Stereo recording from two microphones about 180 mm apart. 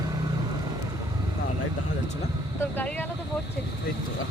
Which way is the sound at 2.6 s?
10° left (ahead or behind).